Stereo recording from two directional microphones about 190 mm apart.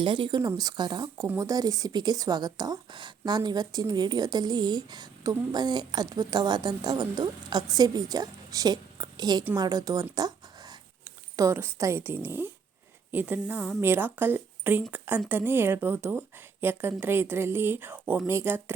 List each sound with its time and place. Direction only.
0.0 s a woman's voice: 25° right (ahead or behind)